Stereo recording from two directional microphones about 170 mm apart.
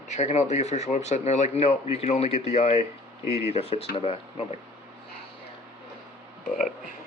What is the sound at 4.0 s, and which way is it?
Speech, 35° left (ahead or behind).